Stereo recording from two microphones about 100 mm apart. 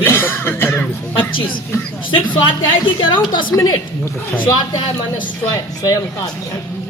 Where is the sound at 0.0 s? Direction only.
20° left (ahead or behind).